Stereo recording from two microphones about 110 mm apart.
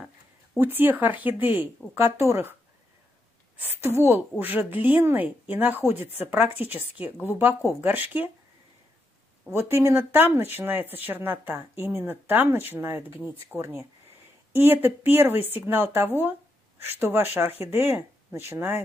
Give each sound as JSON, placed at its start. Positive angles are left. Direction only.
{"t": 0.6, "sound": "a woman's voice", "side_deg": -20}
{"t": 3.8, "sound": "a woman's voice", "side_deg": -20}
{"t": 9.5, "sound": "speech", "side_deg": -20}